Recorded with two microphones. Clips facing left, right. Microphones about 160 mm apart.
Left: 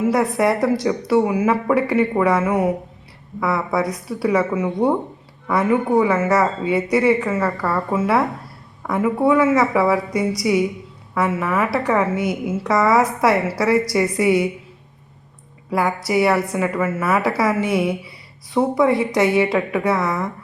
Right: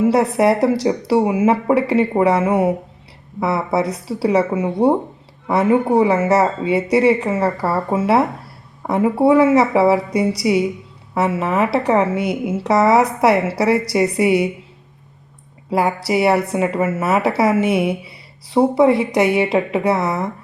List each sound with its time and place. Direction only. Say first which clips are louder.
0.0 s a woman's voice: right 3 dB; 25° right (ahead or behind)
15.7 s a woman's voice: right 2 dB; 25° right (ahead or behind)